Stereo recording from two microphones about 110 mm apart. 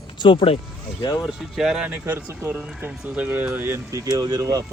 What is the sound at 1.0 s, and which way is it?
Speech, 35° left (ahead or behind).